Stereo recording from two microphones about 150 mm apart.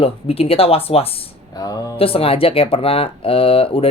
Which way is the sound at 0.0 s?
40° left (ahead or behind).